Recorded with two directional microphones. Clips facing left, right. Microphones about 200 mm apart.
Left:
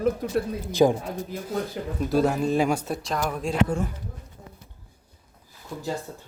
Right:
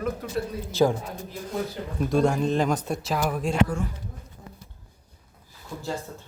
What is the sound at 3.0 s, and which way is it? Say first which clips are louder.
Speech: right 3 dB; 5° right (ahead or behind).